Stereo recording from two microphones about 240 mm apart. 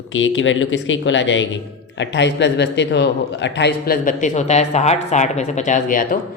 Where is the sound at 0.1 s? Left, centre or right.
Left.